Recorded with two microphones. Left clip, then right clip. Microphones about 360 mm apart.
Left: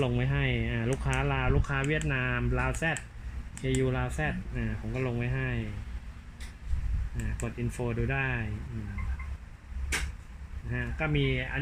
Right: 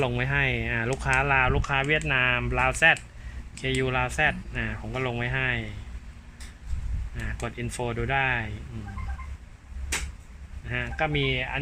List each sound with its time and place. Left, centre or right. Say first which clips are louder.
0.0 s speech: right 6 dB; right
7.4 s speech: right 4 dB; right
10.7 s speech: right 5 dB; right